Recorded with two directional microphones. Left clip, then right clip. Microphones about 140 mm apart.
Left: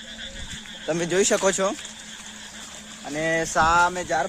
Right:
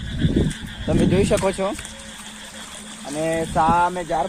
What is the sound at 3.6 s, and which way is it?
Music, 35° left (ahead or behind).